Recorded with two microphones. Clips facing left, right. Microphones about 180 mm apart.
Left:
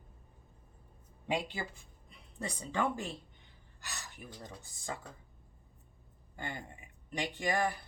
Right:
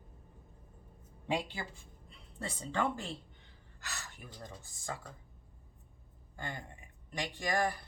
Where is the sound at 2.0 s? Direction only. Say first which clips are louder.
Left 1 dB; 15° left (ahead or behind).